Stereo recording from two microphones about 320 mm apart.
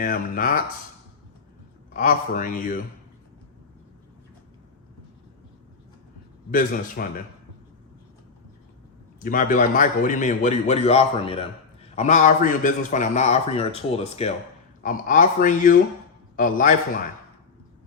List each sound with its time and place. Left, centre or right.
0.0 s a man's voice: left
1.9 s a man's voice: left
6.5 s a man's voice: left
9.2 s a man's voice: left